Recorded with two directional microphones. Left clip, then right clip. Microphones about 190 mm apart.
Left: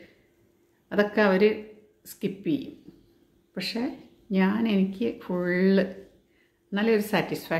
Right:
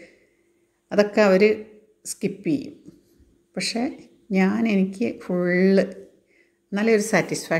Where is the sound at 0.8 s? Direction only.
25° right (ahead or behind).